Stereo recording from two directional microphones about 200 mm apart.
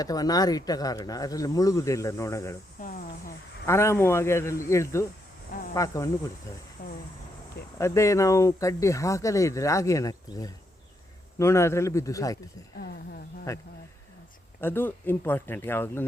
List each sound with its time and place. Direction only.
0.0 s speech: 20° left (ahead or behind)
2.8 s cricket: 40° left (ahead or behind)
3.7 s speech: 15° left (ahead or behind)
7.8 s speech: 15° left (ahead or behind)
12.8 s speech: 50° left (ahead or behind)
13.5 s speech: 15° left (ahead or behind)